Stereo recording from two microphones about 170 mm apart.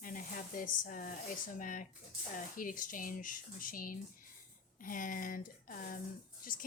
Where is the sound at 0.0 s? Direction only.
50° left (ahead or behind).